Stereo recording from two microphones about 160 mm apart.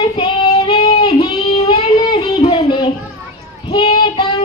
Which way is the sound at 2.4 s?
40° left (ahead or behind).